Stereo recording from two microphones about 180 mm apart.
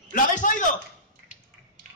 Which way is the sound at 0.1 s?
45° left (ahead or behind).